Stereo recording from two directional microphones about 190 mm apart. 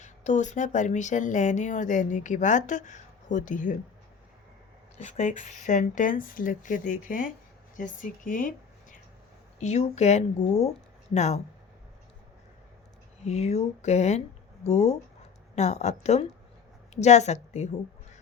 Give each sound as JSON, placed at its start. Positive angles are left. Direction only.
{"t": 0.0, "sound": "speech", "side_deg": 40}
{"t": 4.9, "sound": "speech", "side_deg": 40}
{"t": 13.2, "sound": "speech", "side_deg": 35}